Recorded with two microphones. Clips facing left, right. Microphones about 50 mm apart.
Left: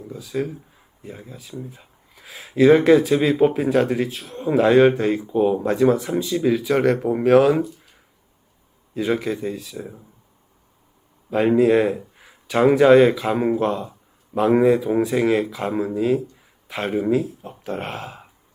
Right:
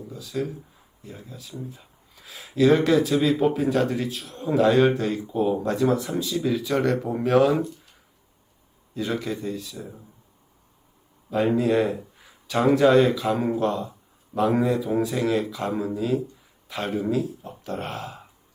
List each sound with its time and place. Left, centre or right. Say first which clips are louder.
0.1 s speech: left 4 dB; centre
9.0 s speech: left 5 dB; centre
11.3 s speech: left 5 dB; left